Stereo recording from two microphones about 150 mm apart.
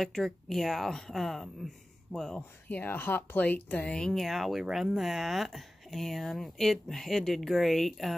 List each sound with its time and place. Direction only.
0.0 s speech: centre (ahead or behind)